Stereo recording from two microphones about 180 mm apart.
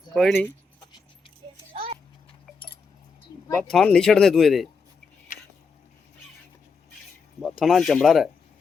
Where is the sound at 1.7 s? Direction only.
30° right (ahead or behind).